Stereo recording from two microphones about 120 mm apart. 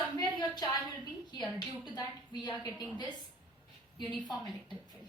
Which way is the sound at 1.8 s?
35° left (ahead or behind).